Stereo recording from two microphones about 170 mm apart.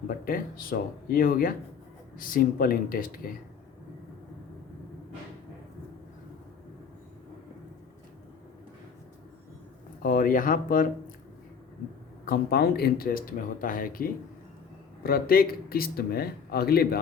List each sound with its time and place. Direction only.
0.3 s a man's voice: 55° left (ahead or behind)
10.0 s speech: 55° left (ahead or behind)
12.2 s a man's voice: 65° left (ahead or behind)